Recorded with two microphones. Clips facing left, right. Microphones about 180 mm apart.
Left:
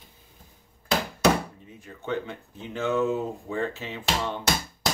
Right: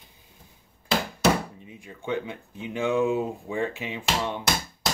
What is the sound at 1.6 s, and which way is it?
Speech, 15° right (ahead or behind).